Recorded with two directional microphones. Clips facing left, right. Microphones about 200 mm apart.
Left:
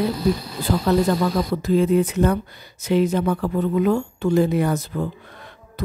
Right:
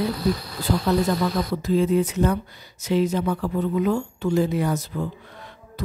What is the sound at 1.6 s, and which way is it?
Speech, 60° left (ahead or behind).